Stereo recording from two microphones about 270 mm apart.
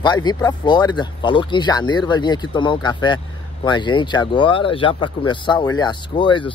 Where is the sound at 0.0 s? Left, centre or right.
Centre.